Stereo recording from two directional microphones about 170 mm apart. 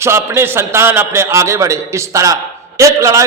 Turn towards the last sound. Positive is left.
turn(degrees=-20)  # may be behind; listen again after turning